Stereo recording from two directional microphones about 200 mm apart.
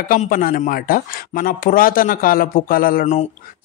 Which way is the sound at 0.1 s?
45° left (ahead or behind).